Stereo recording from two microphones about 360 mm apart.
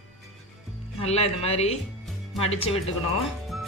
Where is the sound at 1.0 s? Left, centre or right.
Centre.